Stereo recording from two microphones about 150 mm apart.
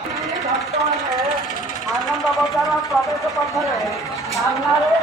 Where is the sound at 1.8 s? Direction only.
Centre (ahead or behind).